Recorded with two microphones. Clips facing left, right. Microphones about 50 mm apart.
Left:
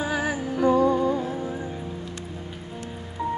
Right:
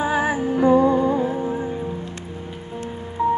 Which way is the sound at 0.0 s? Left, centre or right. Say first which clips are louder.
Right 5 dB; right.